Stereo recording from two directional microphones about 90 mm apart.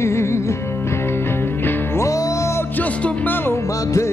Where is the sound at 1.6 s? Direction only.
35° left (ahead or behind).